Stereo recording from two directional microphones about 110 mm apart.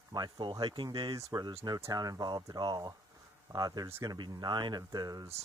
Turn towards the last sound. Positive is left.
turn(degrees=-35)  # may be behind; listen again after turning